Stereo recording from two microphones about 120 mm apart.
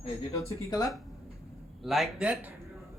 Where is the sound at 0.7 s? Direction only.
30° left (ahead or behind).